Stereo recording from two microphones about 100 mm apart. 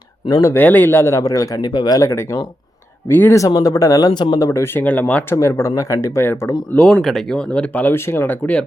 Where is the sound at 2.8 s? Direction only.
25° left (ahead or behind).